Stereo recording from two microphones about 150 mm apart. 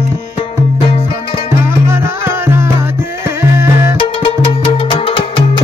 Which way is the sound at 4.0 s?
30° left (ahead or behind).